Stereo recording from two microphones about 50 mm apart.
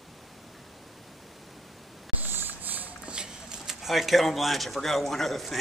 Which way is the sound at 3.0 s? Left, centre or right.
Centre.